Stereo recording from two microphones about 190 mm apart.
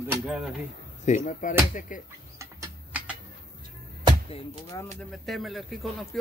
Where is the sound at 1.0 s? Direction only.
40° left (ahead or behind).